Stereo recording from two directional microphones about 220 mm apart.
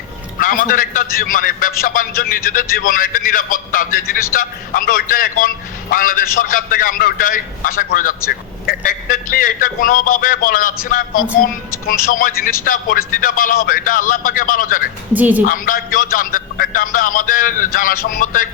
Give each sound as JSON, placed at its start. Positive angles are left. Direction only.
{"t": 0.3, "sound": "a man's voice", "side_deg": 40}
{"t": 15.1, "sound": "a woman's voice", "side_deg": -5}
{"t": 15.4, "sound": "a man's voice", "side_deg": 40}